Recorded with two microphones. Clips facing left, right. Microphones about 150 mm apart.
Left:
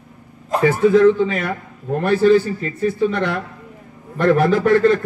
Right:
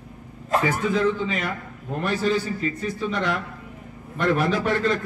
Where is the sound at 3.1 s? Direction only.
55° left (ahead or behind).